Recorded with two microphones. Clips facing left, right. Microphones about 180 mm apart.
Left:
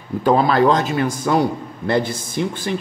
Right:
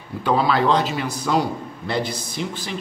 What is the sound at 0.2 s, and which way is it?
A man's voice, 45° left (ahead or behind).